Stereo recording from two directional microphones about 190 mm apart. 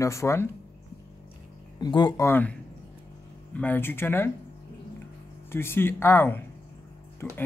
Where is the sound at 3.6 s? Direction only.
10° left (ahead or behind).